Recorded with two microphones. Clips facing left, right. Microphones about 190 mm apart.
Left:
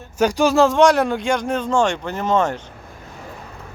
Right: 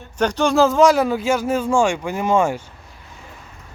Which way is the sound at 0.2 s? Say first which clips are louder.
Left 1 dB; 10° left (ahead or behind).